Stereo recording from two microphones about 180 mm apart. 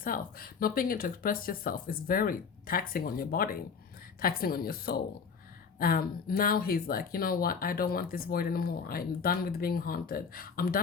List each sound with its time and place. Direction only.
0.0 s speech: 55° left (ahead or behind)